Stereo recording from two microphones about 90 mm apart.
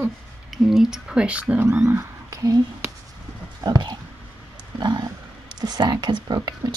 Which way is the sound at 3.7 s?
50° right (ahead or behind).